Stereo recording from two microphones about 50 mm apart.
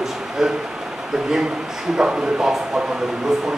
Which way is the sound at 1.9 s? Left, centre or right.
Centre.